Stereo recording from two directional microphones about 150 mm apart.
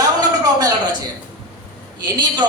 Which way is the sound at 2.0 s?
30° right (ahead or behind).